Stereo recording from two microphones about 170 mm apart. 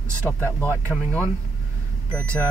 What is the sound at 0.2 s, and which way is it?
Speech, 10° left (ahead or behind).